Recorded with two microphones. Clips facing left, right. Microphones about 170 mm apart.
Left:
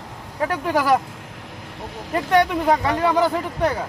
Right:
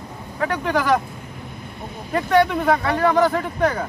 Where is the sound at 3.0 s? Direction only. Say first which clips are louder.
Right 2 dB; 10° left (ahead or behind).